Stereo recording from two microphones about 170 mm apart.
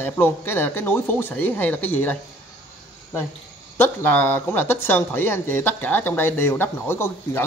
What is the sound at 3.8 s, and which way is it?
Speech, 15° left (ahead or behind).